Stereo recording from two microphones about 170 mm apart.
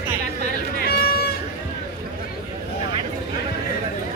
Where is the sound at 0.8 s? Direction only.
65° left (ahead or behind).